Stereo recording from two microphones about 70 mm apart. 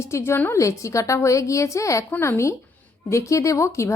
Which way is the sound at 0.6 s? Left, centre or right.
Left.